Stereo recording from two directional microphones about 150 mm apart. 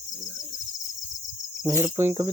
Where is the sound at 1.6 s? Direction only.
25° right (ahead or behind).